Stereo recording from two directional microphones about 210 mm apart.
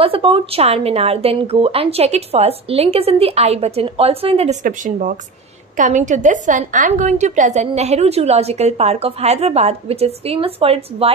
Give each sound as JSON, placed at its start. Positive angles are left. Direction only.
{"t": 0.0, "sound": "a woman's voice", "side_deg": -25}
{"t": 4.6, "sound": "a woman's voice", "side_deg": -40}